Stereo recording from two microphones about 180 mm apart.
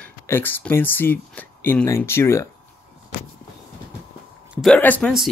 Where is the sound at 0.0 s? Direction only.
10° left (ahead or behind).